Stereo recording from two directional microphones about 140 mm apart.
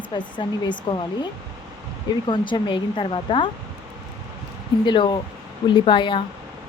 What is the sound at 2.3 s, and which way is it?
Speech, 30° left (ahead or behind).